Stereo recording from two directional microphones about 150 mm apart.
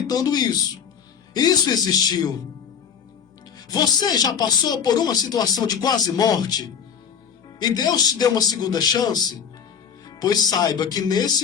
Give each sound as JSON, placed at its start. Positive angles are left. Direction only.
{"t": 0.1, "sound": "speech", "side_deg": 25}
{"t": 3.7, "sound": "speech", "side_deg": 25}